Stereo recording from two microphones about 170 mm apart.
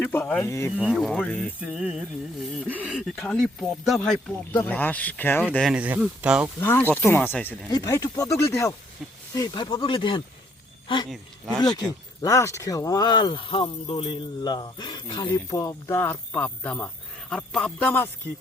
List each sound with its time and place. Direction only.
0.0 s speech: 10° left (ahead or behind)
0.8 s speech: centre (ahead or behind)
5.5 s speech: 5° right (ahead or behind)
6.6 s speech: 15° left (ahead or behind)
7.7 s speech: 20° left (ahead or behind)
12.2 s speech: 20° left (ahead or behind); by 17.9 s 5° left (ahead or behind)